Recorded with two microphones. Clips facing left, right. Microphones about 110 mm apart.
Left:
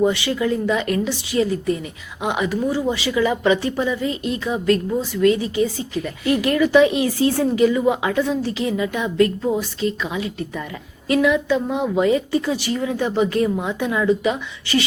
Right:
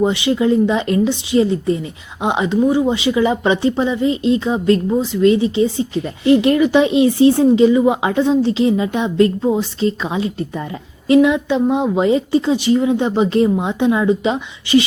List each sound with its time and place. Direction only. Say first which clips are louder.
0.0 s speech: right 4 dB; 20° right (ahead or behind)